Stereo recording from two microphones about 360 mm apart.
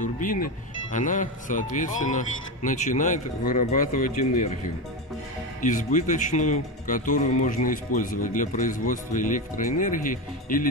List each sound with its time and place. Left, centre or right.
0.0 s speech: left
5.6 s speech: left